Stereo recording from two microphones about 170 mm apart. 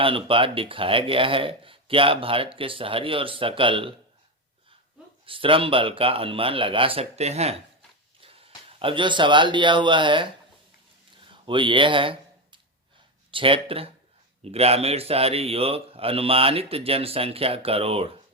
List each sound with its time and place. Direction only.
0.0 s speech: 30° right (ahead or behind)
5.2 s speech: 30° right (ahead or behind)
11.3 s a sound: 30° right (ahead or behind)
13.3 s speech: 30° right (ahead or behind)